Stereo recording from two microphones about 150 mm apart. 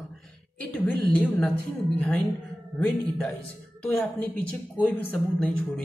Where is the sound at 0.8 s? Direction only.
10° left (ahead or behind).